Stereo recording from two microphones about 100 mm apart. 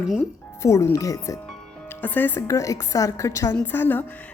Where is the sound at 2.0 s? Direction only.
20° left (ahead or behind).